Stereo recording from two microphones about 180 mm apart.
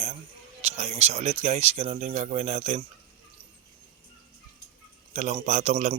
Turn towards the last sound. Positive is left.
turn(degrees=-35)  # may be behind; listen again after turning